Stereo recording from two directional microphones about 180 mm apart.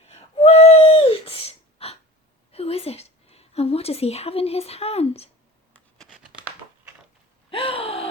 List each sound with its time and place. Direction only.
0.1 s gasp: 35° left (ahead or behind)
2.5 s a sound: 35° left (ahead or behind)
6.0 s crumpling: 5° right (ahead or behind)
7.5 s gasp: 30° left (ahead or behind)